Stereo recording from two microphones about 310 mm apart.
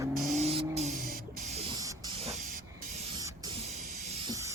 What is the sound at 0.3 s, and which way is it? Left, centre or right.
Vehicle, centre.